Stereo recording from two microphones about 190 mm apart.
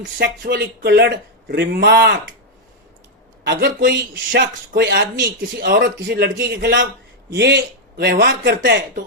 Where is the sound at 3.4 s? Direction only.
60° right (ahead or behind).